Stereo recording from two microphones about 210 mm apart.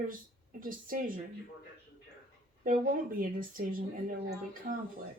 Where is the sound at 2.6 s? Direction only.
40° right (ahead or behind).